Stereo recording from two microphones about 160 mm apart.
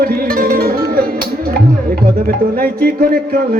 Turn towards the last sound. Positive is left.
turn(degrees=-70)  # may be behind; listen again after turning